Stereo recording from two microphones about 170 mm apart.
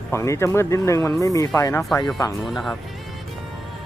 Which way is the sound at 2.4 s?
Centre (ahead or behind).